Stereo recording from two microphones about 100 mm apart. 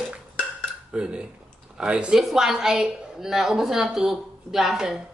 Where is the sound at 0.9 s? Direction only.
10° right (ahead or behind).